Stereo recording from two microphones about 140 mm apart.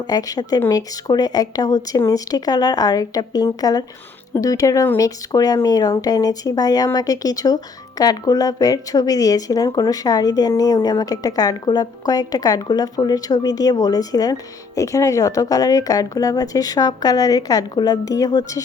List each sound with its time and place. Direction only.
0.1 s speech: 25° left (ahead or behind)